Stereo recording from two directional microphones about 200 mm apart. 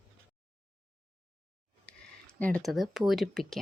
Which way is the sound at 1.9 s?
5° left (ahead or behind).